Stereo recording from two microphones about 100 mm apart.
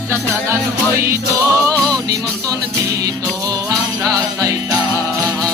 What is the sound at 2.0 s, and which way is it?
Music, 35° right (ahead or behind).